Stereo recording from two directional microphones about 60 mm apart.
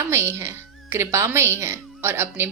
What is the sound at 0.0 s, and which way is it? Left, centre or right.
A woman's voice, right.